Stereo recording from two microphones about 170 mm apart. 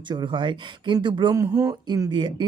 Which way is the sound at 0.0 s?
30° right (ahead or behind).